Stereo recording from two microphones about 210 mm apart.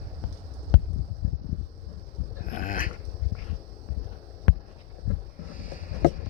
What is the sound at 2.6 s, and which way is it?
Dog, 40° left (ahead or behind).